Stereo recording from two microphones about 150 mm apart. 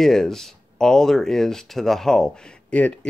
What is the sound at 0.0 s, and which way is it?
Speech, centre (ahead or behind).